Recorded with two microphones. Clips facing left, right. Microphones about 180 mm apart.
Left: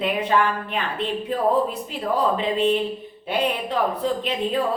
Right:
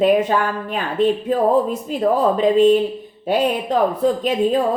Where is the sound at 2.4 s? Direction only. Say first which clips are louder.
Right 8 dB; 45° right (ahead or behind).